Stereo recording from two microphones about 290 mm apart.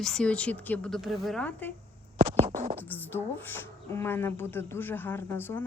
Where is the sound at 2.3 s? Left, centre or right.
Right.